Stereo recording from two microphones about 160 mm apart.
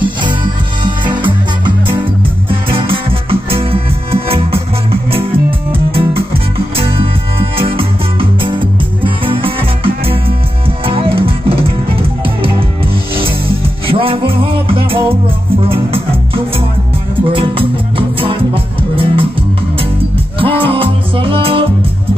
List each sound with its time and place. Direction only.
0.8 s music: 30° right (ahead or behind)
5.7 s music: 35° right (ahead or behind)
13.8 s music: 35° right (ahead or behind)
17.3 s music: 35° right (ahead or behind)
20.3 s music: 35° right (ahead or behind)